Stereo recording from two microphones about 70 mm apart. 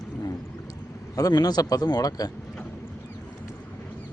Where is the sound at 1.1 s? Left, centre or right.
Left.